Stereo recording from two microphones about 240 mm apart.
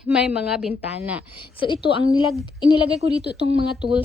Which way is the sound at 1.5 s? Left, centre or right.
Left.